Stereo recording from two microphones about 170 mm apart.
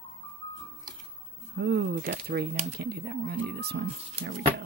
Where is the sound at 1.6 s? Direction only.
65° right (ahead or behind).